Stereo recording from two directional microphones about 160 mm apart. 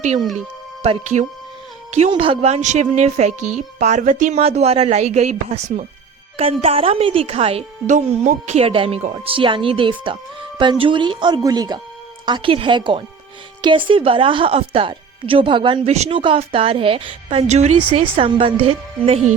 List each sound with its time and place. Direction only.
0.3 s speech: 45° right (ahead or behind)
2.0 s a woman's voice: 35° right (ahead or behind); by 4.4 s 55° right (ahead or behind)
4.4 s a woman's voice: 40° right (ahead or behind)